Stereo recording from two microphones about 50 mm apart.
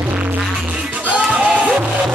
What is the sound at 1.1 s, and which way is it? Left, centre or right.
Music, right.